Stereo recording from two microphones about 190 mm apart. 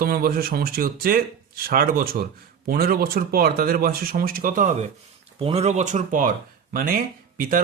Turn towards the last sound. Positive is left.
turn(degrees=-45)  # may be behind; listen again after turning